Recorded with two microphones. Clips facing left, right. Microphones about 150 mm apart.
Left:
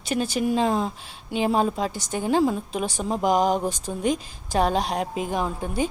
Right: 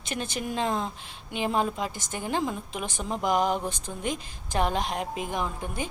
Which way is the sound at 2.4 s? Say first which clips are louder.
Left 8 dB; 30° left (ahead or behind).